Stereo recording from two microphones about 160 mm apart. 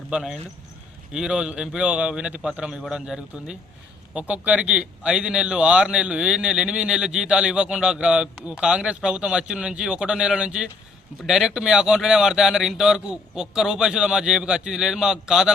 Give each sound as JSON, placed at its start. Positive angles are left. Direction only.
{"t": 0.1, "sound": "a man's voice", "side_deg": 0}